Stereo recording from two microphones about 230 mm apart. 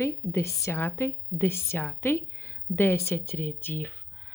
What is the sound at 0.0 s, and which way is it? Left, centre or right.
A woman's voice, centre.